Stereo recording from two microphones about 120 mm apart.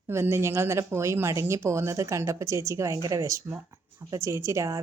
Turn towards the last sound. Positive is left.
turn(degrees=-25)  # may be behind; listen again after turning